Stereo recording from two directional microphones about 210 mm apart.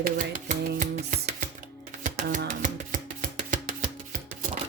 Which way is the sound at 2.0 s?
35° right (ahead or behind).